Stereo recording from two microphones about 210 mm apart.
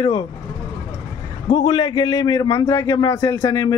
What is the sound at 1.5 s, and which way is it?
A man's voice, 25° left (ahead or behind).